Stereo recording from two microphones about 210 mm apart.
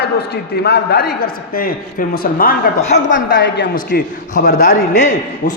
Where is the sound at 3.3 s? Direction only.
55° left (ahead or behind).